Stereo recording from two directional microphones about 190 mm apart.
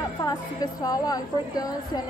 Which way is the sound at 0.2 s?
20° left (ahead or behind).